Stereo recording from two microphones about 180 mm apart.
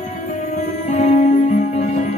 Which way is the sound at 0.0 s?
40° left (ahead or behind).